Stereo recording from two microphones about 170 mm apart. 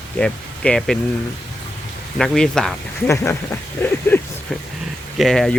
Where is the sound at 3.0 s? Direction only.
15° left (ahead or behind).